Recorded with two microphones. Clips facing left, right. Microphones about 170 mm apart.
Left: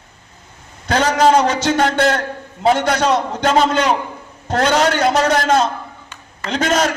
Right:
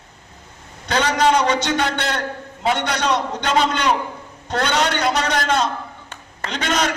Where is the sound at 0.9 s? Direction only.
45° left (ahead or behind).